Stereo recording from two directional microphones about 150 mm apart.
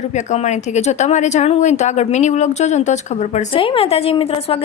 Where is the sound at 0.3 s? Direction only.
50° left (ahead or behind).